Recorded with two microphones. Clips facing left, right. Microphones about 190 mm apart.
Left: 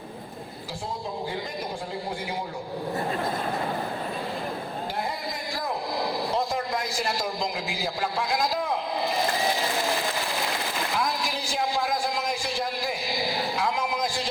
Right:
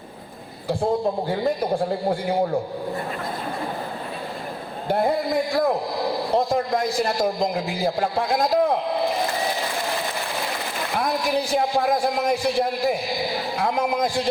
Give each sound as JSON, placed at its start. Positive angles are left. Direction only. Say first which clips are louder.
{"t": 1.3, "sound": "a man's voice", "louder": "right 10 dB", "side_deg": -60}
{"t": 4.9, "sound": "a man's voice", "louder": "right 14 dB", "side_deg": -55}
{"t": 10.9, "sound": "speech", "louder": "right 9 dB", "side_deg": -60}
{"t": 13.6, "sound": "a sound", "louder": "right 8 dB", "side_deg": -55}